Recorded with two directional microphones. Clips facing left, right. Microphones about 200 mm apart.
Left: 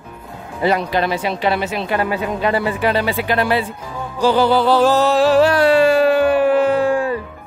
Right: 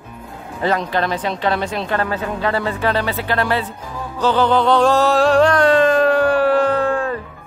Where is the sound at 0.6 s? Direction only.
10° left (ahead or behind).